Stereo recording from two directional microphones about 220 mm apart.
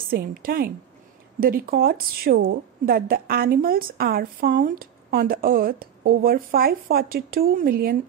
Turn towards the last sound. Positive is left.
turn(degrees=-40)  # may be behind; listen again after turning